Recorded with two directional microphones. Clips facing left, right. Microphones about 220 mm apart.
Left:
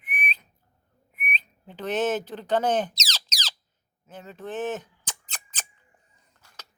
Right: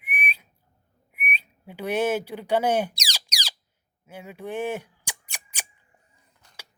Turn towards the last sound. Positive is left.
turn(degrees=-20)  # may be behind; listen again after turning